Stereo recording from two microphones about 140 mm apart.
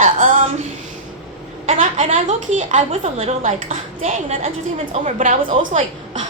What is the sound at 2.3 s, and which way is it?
Speech, 60° right (ahead or behind).